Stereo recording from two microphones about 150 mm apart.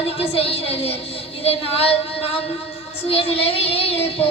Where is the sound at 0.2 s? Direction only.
40° left (ahead or behind).